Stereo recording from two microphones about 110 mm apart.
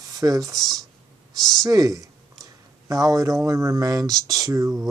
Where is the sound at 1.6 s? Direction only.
30° right (ahead or behind).